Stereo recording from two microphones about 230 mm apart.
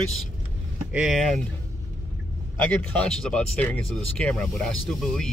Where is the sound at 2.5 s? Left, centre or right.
Centre.